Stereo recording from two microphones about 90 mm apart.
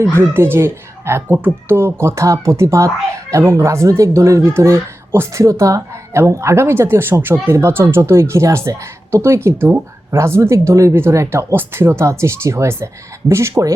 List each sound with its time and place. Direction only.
0.0 s a woman's voice: 25° right (ahead or behind)